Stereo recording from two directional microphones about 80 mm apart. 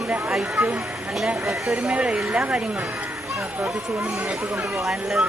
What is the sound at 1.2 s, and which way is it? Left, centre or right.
Speech, centre.